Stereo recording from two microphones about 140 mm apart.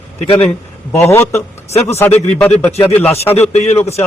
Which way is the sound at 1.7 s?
50° left (ahead or behind).